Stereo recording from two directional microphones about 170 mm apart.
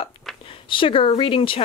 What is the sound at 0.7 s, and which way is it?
Speech, 30° left (ahead or behind).